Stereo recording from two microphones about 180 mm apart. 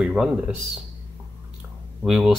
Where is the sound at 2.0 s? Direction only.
5° right (ahead or behind).